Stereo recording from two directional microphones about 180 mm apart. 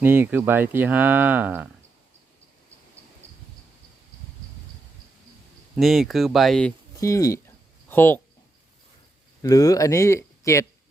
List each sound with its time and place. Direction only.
0.0 s speech: 10° right (ahead or behind)
5.7 s speech: centre (ahead or behind)
7.0 s a sound: 20° left (ahead or behind)
9.4 s speech: 20° left (ahead or behind)